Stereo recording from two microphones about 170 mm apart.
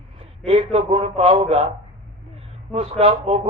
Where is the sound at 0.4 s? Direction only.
35° right (ahead or behind).